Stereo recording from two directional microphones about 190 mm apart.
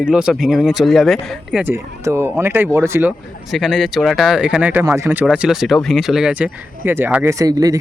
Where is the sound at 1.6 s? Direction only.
15° right (ahead or behind).